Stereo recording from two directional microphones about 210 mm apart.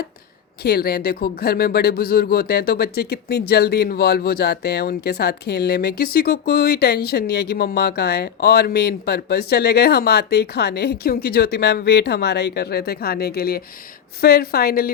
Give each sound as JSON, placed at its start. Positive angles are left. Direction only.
{"t": 0.6, "sound": "speech", "side_deg": 50}